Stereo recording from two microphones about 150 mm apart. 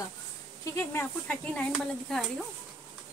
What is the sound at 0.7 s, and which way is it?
Speech, 10° left (ahead or behind).